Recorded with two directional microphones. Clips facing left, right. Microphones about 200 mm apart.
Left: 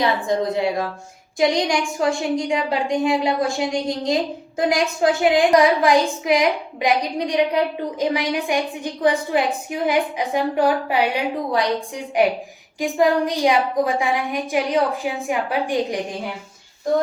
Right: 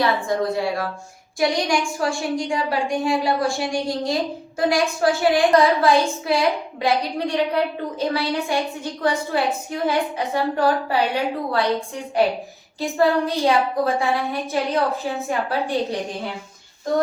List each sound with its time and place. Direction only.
0.0 s a woman's voice: 20° left (ahead or behind)